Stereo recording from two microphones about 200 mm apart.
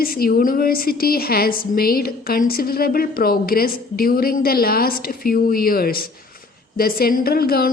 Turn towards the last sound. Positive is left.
turn(degrees=50)  # may be behind; listen again after turning